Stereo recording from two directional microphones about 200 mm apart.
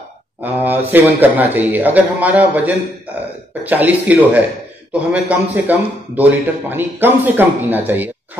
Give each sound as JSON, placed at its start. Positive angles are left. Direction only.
{"t": 0.4, "sound": "a man's voice", "side_deg": -10}